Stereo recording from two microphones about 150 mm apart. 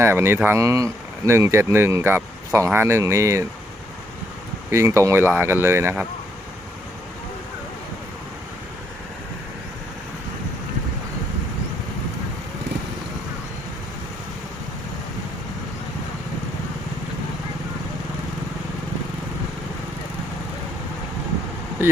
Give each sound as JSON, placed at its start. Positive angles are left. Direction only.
{"t": 0.0, "sound": "speech", "side_deg": -15}
{"t": 4.7, "sound": "speech", "side_deg": -20}